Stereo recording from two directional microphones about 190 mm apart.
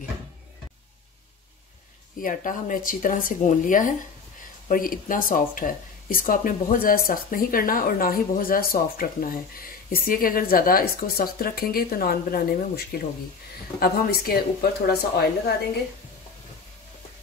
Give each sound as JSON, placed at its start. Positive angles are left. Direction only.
{"t": 2.2, "sound": "speech", "side_deg": 45}